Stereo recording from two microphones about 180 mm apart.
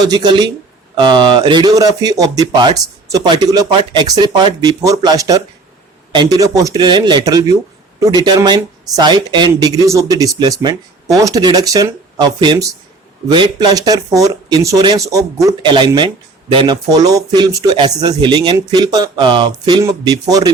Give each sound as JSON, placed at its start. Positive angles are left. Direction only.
{"t": 0.1, "sound": "speech", "side_deg": -25}